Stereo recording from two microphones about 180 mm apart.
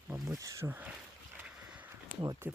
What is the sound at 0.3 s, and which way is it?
Speech, 15° right (ahead or behind).